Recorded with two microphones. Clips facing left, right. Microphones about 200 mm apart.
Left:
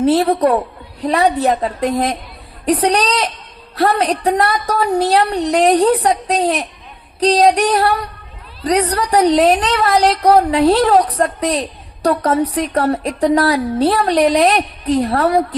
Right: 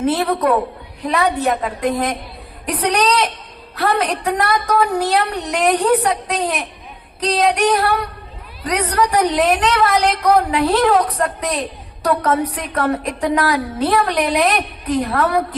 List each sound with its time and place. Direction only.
0.0 s a woman's voice: 35° left (ahead or behind)